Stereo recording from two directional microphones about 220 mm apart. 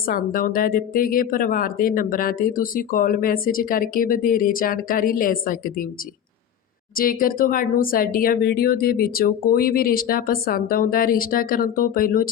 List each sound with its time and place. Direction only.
0.0 s speech: 40° left (ahead or behind)
6.9 s speech: 40° left (ahead or behind)